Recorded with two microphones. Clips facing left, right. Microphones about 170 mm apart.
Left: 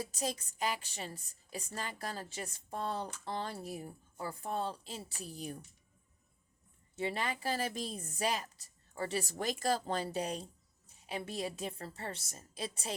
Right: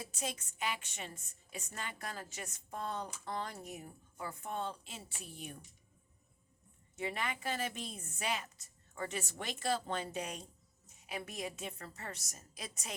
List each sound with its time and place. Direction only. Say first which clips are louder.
0.0 s a woman's voice: left 4 dB; 35° left (ahead or behind)
6.9 s a woman's voice: left 3 dB; 30° left (ahead or behind)